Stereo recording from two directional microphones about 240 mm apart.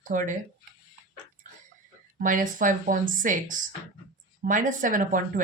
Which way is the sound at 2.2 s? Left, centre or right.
Right.